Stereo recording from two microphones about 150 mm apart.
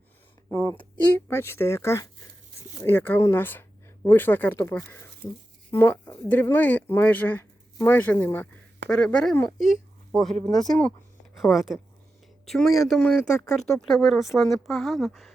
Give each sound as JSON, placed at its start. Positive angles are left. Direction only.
{"t": 0.5, "sound": "speech", "side_deg": 20}
{"t": 13.4, "sound": "speech", "side_deg": 20}
{"t": 13.8, "sound": "speech", "side_deg": 0}